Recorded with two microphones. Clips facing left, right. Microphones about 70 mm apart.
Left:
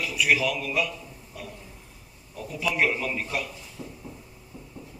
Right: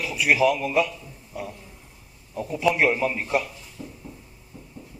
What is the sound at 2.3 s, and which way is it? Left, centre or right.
A man's voice, right.